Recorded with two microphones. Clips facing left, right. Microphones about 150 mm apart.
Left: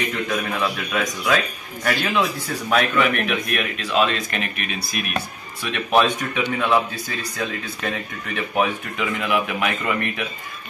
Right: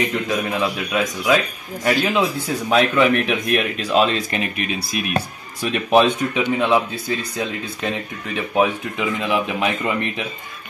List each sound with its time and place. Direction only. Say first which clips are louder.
0.3 s a man's voice: right 2 dB; 15° right (ahead or behind)
6.4 s a man's voice: right 2 dB; 15° right (ahead or behind)